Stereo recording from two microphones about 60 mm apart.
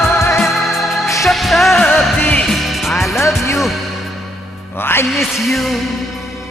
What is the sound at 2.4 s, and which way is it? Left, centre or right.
Music, centre.